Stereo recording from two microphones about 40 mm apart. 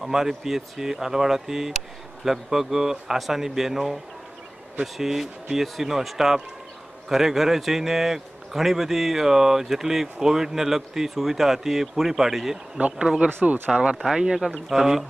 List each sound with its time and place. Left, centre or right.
0.0 s a man's voice: centre
12.8 s speech: right
13.7 s speech: centre
14.1 s a man's voice: centre